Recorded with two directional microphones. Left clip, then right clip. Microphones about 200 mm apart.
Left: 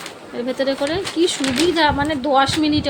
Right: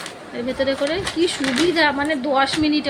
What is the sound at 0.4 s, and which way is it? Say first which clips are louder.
A woman's voice: even; 15° left (ahead or behind).